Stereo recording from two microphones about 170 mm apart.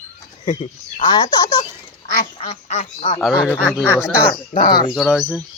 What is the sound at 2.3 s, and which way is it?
Speech, 40° left (ahead or behind).